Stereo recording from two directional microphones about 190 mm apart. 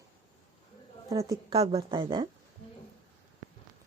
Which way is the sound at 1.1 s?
15° right (ahead or behind).